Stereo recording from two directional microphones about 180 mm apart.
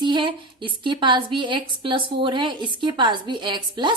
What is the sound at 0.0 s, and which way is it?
A woman's voice, 25° right (ahead or behind).